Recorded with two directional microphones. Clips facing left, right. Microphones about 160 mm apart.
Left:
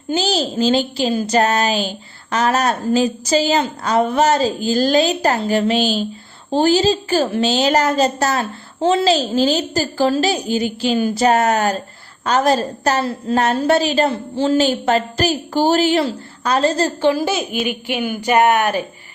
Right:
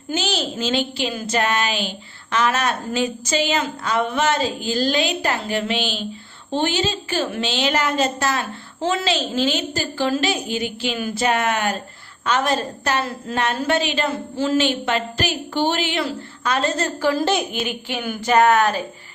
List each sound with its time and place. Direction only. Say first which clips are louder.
0.1 s a woman's voice: left 5 dB; 35° left (ahead or behind)
17.1 s a woman's voice: right 1 dB; 10° left (ahead or behind)